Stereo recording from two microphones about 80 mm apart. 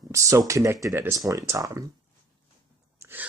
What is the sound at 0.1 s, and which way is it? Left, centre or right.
Speech, right.